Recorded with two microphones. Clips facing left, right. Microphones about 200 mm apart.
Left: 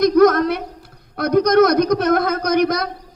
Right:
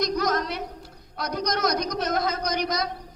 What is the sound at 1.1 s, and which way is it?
A man's voice, 55° left (ahead or behind).